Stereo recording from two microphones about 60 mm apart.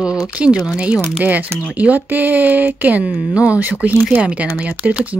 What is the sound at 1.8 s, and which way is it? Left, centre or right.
Speech, right.